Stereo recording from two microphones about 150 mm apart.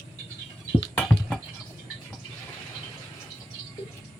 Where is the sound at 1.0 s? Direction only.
5° left (ahead or behind).